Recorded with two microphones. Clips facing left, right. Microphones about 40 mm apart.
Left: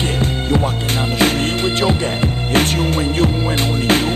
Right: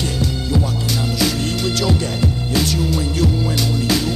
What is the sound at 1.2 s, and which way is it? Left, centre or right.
Music, left.